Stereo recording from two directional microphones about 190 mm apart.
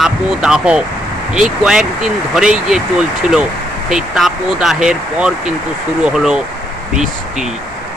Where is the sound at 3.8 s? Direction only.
5° right (ahead or behind).